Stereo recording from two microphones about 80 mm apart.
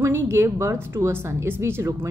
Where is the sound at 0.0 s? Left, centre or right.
Right.